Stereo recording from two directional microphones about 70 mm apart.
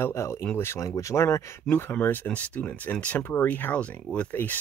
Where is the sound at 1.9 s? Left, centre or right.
Left.